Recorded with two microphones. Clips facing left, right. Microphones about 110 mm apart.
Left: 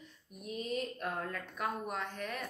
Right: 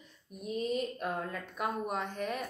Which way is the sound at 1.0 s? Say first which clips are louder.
Right 2 dB; 10° right (ahead or behind).